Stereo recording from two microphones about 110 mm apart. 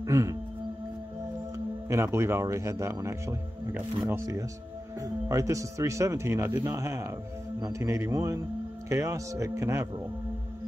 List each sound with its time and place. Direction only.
0.0 s music: 30° right (ahead or behind)
1.9 s speech: 25° right (ahead or behind)